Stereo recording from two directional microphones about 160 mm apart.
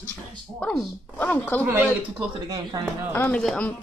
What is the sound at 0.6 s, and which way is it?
A woman's voice, 10° left (ahead or behind).